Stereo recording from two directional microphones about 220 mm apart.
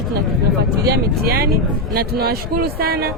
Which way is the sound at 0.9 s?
45° right (ahead or behind).